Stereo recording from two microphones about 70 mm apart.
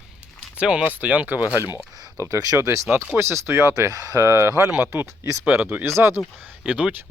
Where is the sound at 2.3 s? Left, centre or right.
Right.